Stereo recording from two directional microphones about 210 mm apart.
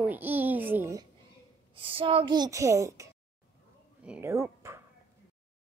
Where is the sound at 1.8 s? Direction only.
25° right (ahead or behind).